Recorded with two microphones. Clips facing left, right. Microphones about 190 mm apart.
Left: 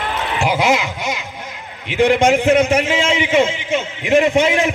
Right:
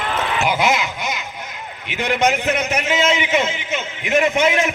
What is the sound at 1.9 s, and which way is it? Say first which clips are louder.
A man's voice: left 6 dB; 30° left (ahead or behind).